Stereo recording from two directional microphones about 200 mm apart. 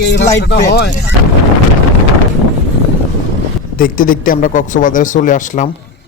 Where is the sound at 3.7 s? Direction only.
45° left (ahead or behind).